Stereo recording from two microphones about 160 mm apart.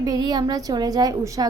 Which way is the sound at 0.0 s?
25° right (ahead or behind).